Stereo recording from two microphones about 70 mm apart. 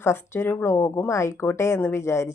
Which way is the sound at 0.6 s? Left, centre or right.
Left.